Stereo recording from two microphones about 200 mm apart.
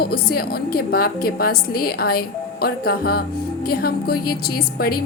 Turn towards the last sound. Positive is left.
turn(degrees=50)  # may be behind; listen again after turning